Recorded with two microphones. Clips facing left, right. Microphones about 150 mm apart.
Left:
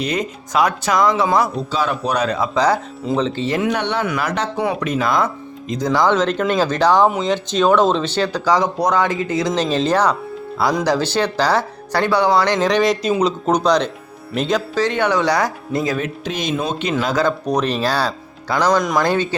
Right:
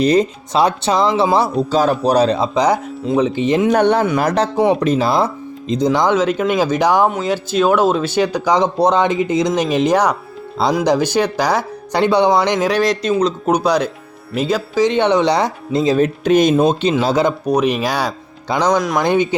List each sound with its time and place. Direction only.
0.0 s speech: 35° right (ahead or behind)
1.5 s speech: 40° right (ahead or behind); by 3.7 s 20° right (ahead or behind)
3.7 s speech: 45° right (ahead or behind); by 6.1 s 20° right (ahead or behind)
6.1 s speech: 10° right (ahead or behind)
12.5 s speech: 5° right (ahead or behind)
13.4 s speech: 10° right (ahead or behind)
14.8 s speech: 20° right (ahead or behind)
16.2 s speech: 50° right (ahead or behind)
17.0 s speech: 30° right (ahead or behind)
17.4 s speech: 10° right (ahead or behind)